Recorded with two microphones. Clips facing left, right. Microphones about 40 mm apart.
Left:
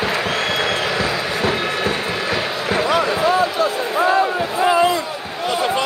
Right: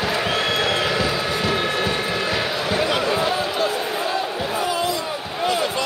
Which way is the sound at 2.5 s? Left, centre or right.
Left.